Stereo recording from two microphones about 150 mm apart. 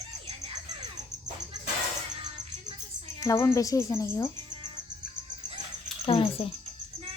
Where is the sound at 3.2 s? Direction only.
20° left (ahead or behind).